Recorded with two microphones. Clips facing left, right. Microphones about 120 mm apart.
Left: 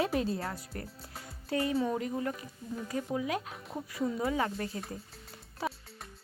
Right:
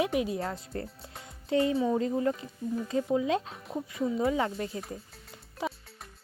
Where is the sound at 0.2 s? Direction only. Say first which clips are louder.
Right 2 dB; 20° right (ahead or behind).